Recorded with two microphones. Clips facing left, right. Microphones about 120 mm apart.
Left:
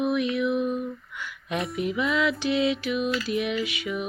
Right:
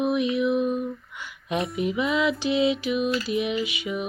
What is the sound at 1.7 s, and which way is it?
Music, 25° right (ahead or behind).